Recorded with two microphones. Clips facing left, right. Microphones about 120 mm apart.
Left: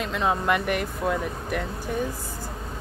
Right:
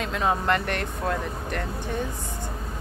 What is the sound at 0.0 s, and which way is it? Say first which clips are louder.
Speech: even; centre (ahead or behind).